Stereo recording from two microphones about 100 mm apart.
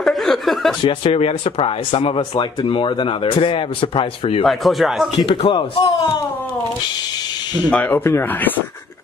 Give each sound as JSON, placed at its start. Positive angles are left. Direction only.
{"t": 0.0, "sound": "chuckle", "side_deg": 5}
{"t": 0.8, "sound": "speech", "side_deg": 70}
{"t": 4.5, "sound": "speech", "side_deg": 0}
{"t": 5.2, "sound": "speech", "side_deg": 60}
{"t": 7.7, "sound": "speech", "side_deg": 15}